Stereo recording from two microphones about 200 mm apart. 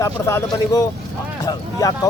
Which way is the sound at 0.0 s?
15° left (ahead or behind).